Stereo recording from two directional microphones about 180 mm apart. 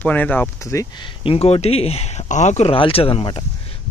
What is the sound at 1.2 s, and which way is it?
Speech, 30° left (ahead or behind).